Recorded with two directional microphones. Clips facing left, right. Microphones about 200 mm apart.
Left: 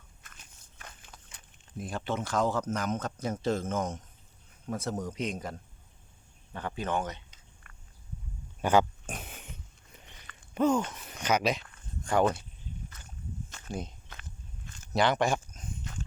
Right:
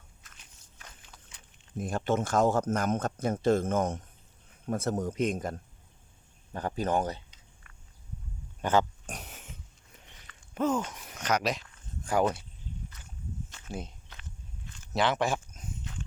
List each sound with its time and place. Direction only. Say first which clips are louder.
0.2 s biting: left 5 dB; 55° left (ahead or behind)
1.8 s speech: right 5 dB; 45° right (ahead or behind)
7.3 s a sound: left 1 dB; 50° left (ahead or behind)
8.6 s pig: left 2 dB; 10° left (ahead or behind)
9.1 s a sound: left 2 dB; centre (ahead or behind)
10.5 s speech: left 3 dB; centre (ahead or behind)
13.7 s speech: left 2 dB; 5° right (ahead or behind)
14.9 s speech: left 1 dB; centre (ahead or behind)
15.8 s dog: left 1 dB; 45° left (ahead or behind)